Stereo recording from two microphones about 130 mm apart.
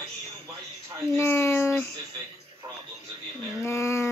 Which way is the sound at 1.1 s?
20° left (ahead or behind).